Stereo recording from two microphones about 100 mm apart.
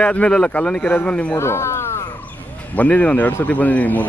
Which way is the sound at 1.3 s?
25° left (ahead or behind).